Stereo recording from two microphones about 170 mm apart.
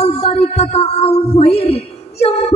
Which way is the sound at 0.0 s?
40° left (ahead or behind).